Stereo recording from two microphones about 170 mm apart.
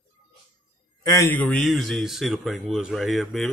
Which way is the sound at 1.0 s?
15° left (ahead or behind).